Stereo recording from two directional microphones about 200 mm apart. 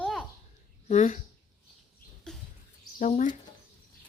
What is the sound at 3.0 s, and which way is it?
Speech, 40° left (ahead or behind).